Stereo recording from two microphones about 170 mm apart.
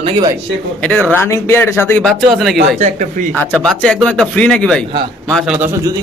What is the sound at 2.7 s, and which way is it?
Speech, 45° right (ahead or behind).